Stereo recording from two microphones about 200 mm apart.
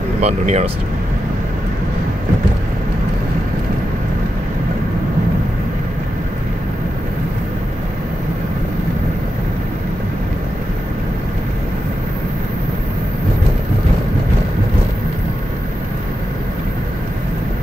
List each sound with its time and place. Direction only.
0.2 s speech: 35° right (ahead or behind)